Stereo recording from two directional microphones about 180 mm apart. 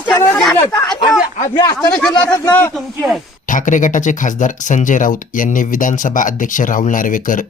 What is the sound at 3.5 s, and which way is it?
Speech, 45° left (ahead or behind).